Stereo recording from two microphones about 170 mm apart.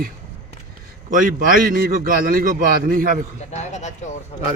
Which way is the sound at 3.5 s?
40° left (ahead or behind).